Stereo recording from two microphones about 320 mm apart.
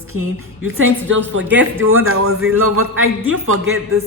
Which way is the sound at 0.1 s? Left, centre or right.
Right.